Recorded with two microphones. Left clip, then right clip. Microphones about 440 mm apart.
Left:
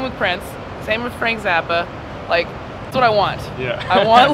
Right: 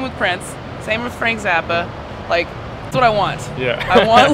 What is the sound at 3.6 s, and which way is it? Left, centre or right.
Speech, centre.